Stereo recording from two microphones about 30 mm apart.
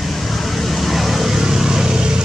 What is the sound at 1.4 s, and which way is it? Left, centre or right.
Vehicle, right.